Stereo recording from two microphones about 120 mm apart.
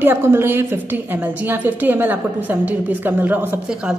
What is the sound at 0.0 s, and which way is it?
A woman's voice, 20° right (ahead or behind).